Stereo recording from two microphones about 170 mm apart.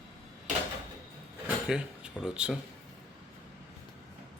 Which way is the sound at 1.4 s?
5° right (ahead or behind).